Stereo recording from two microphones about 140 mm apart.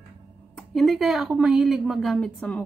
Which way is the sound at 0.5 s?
Centre (ahead or behind).